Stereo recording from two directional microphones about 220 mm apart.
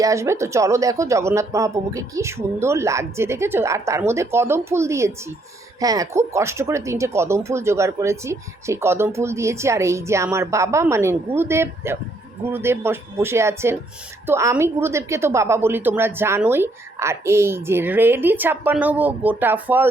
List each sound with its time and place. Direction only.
0.0 s speech: 15° right (ahead or behind)